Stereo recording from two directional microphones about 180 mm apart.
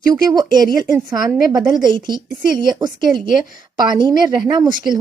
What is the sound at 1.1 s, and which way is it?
A woman's voice, 20° right (ahead or behind).